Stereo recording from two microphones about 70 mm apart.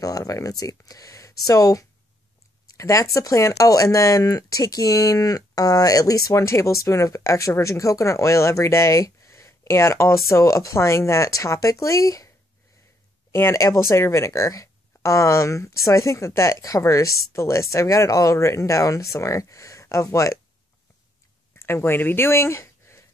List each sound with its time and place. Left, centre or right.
0.0 s speech: left
13.3 s speech: left
21.5 s speech: left